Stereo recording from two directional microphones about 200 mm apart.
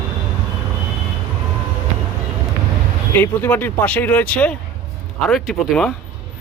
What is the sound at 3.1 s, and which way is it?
Speech, 10° left (ahead or behind).